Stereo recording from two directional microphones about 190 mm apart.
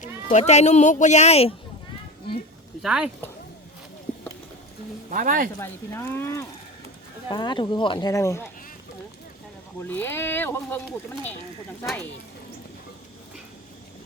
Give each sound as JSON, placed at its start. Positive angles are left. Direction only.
{"t": 0.0, "sound": "speech", "side_deg": 40}
{"t": 2.8, "sound": "speech", "side_deg": -5}
{"t": 5.1, "sound": "speech", "side_deg": -45}
{"t": 5.5, "sound": "speech", "side_deg": 10}
{"t": 7.3, "sound": "speech", "side_deg": 25}
{"t": 9.9, "sound": "speech", "side_deg": 10}